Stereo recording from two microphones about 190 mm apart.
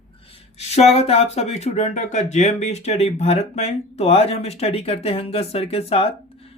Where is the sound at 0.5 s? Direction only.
35° left (ahead or behind).